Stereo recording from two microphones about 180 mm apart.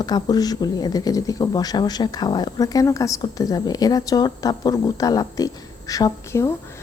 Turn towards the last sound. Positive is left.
turn(degrees=15)  # may be behind; listen again after turning